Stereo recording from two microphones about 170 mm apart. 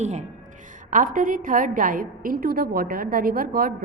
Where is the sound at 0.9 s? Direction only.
55° right (ahead or behind).